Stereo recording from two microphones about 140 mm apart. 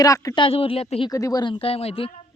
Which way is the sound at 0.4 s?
40° left (ahead or behind).